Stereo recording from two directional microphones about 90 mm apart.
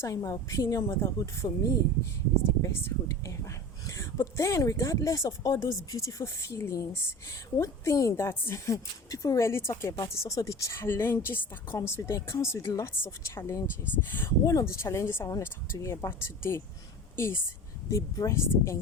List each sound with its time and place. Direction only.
0.0 s speech: 40° left (ahead or behind)
2.6 s speech: 30° left (ahead or behind)
14.1 s speech: 25° left (ahead or behind)